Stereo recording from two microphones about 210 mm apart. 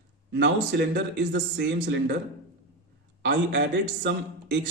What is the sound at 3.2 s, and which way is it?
A man's voice, 60° right (ahead or behind).